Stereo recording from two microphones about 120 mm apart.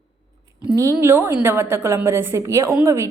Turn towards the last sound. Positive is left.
turn(degrees=-25)  # may be behind; listen again after turning